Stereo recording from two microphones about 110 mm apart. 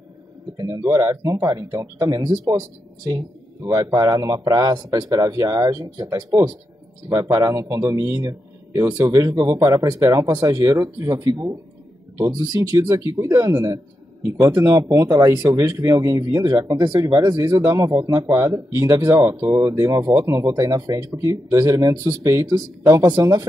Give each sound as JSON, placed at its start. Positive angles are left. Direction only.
{"t": 0.6, "sound": "a man's voice", "side_deg": -30}
{"t": 3.7, "sound": "a man's voice", "side_deg": -30}